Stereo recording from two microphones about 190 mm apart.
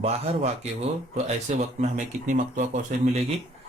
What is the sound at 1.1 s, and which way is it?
Speech, 35° right (ahead or behind).